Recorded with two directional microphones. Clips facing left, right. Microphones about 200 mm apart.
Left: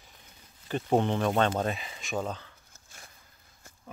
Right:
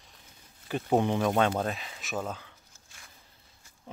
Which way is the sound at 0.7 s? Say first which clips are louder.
Even; 10° right (ahead or behind).